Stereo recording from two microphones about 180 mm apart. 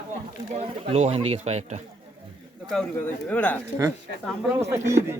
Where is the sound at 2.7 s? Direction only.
5° left (ahead or behind).